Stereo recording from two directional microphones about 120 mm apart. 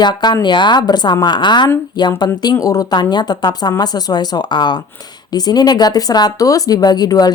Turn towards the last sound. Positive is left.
turn(degrees=35)  # may be behind; listen again after turning